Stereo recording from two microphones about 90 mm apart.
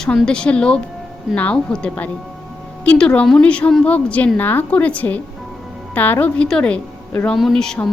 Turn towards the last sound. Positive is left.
turn(degrees=5)  # may be behind; listen again after turning